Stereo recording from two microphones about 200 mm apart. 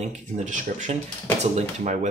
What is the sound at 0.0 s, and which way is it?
Speech, 35° right (ahead or behind).